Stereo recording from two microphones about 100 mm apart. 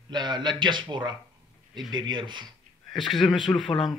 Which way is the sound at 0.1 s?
45° right (ahead or behind).